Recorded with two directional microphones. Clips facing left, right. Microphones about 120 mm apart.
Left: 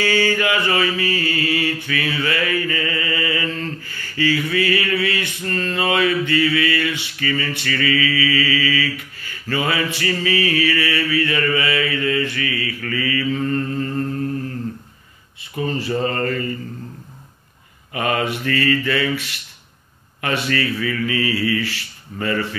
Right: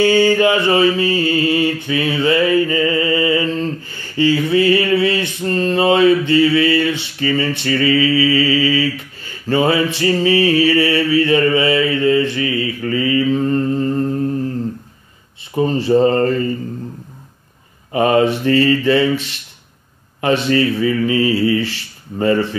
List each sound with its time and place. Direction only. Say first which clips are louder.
0.0 s mantra: right 7 dB; 25° right (ahead or behind)
15.5 s a man's voice: right 8 dB; 25° right (ahead or behind)
17.9 s a man's voice: right 8 dB; 30° right (ahead or behind)